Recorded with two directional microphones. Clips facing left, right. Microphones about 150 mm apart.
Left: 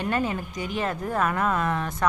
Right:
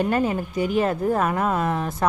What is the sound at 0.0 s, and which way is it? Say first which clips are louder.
Speech: right 5 dB; 30° right (ahead or behind).